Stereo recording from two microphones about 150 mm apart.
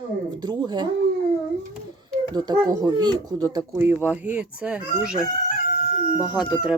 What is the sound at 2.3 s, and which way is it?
Speech, 25° right (ahead or behind).